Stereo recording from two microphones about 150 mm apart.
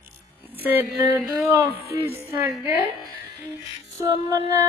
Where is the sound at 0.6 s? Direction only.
10° right (ahead or behind).